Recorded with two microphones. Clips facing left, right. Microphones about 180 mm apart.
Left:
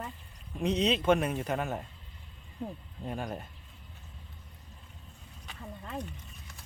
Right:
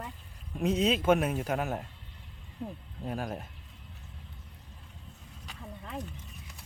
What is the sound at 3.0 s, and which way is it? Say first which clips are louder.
Speech: right 1 dB; centre (ahead or behind).